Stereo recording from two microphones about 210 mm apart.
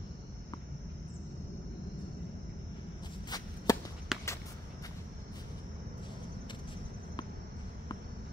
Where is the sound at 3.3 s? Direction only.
20° left (ahead or behind).